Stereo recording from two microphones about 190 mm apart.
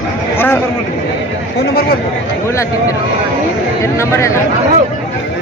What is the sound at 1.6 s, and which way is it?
Speech, 55° left (ahead or behind).